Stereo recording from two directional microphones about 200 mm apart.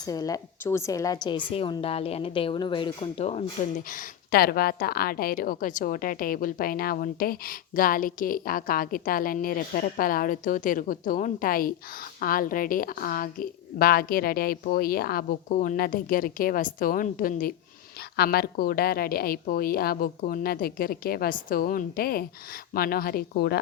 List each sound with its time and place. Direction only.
0.0 s a woman's voice: 20° left (ahead or behind)
4.3 s a woman's voice: 50° left (ahead or behind)